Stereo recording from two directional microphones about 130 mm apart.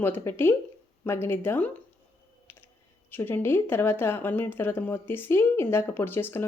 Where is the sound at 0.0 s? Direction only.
15° left (ahead or behind).